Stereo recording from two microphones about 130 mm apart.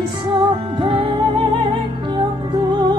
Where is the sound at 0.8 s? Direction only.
40° right (ahead or behind).